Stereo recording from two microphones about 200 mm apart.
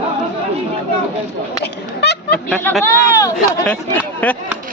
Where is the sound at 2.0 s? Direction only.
55° left (ahead or behind).